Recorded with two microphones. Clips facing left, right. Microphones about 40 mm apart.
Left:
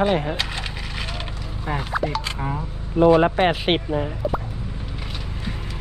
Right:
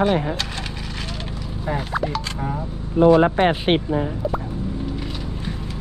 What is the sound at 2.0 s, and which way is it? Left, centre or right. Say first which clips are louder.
Speech: left 1 dB; centre.